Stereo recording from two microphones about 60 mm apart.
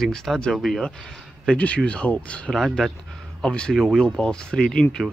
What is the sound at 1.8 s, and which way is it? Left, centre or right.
Speech, centre.